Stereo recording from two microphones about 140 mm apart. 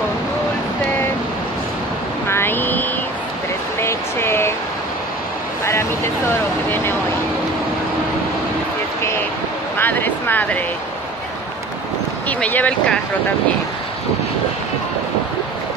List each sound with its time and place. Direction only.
2.2 s vehicle: 15° left (ahead or behind)
3.8 s a sound: 15° left (ahead or behind)
6.7 s speech: 15° left (ahead or behind)
9.8 s speech: 15° left (ahead or behind)
12.3 s speech: 10° left (ahead or behind)